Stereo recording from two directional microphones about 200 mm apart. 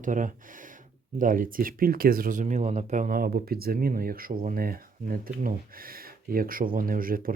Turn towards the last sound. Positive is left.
turn(degrees=-45)  # may be behind; listen again after turning